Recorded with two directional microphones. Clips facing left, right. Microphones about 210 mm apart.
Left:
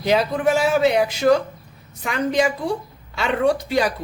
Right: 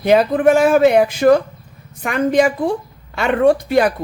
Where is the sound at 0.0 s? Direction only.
55° right (ahead or behind).